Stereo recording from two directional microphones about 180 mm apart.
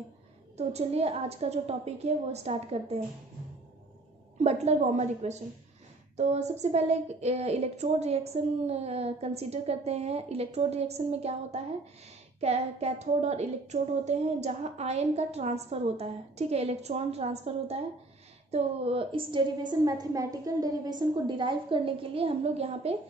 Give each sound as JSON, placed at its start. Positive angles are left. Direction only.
{"t": 0.6, "sound": "speech", "side_deg": -35}
{"t": 4.4, "sound": "a woman's voice", "side_deg": -40}